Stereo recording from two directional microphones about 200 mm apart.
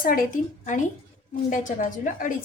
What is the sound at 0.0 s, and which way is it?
A woman's voice, 45° left (ahead or behind).